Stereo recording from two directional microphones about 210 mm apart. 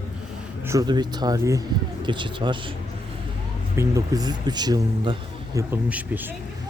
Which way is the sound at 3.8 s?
15° right (ahead or behind).